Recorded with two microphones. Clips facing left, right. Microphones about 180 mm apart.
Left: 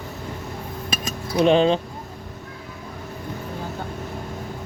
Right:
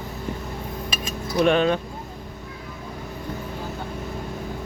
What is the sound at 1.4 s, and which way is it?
Speech, 25° left (ahead or behind).